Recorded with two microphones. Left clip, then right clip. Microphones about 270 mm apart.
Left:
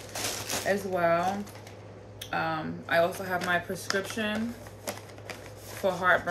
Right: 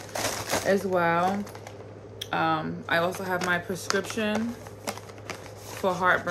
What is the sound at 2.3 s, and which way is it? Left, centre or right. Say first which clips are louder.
Speech: right 4 dB; centre.